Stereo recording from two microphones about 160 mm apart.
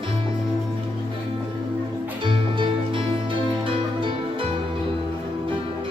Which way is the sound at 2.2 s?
30° right (ahead or behind).